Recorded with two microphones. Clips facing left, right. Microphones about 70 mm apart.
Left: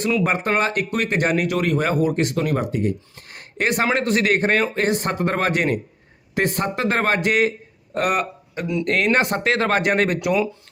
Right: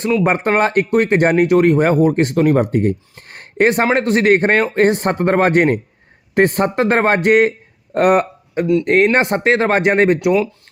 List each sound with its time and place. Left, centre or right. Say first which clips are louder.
0.3 s speech: right 5 dB; right
8.8 s speech: right 3 dB; right